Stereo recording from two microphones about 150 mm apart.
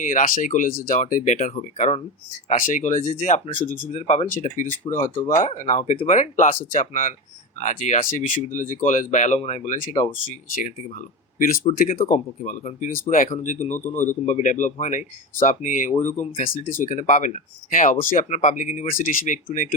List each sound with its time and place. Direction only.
0.0 s speech: 60° left (ahead or behind)
11.8 s speech: 65° left (ahead or behind)